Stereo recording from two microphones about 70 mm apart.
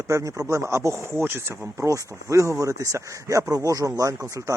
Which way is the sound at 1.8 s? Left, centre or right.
Right.